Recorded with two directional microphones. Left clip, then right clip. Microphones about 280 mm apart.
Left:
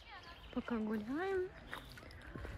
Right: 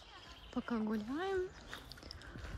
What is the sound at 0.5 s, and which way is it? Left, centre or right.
Speech, centre.